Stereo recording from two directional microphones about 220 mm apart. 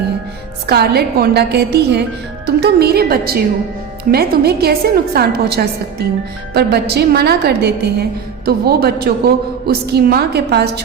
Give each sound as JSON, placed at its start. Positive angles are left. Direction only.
{"t": 0.7, "sound": "a woman's voice", "side_deg": -45}